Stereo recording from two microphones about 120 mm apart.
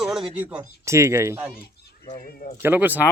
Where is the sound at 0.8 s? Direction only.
25° right (ahead or behind).